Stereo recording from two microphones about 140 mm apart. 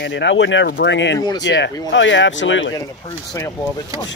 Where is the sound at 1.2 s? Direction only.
30° left (ahead or behind).